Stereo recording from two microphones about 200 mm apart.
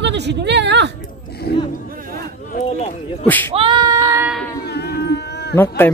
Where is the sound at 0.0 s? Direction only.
60° right (ahead or behind).